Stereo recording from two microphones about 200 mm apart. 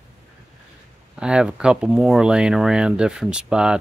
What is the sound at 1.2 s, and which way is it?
Speech, 5° right (ahead or behind).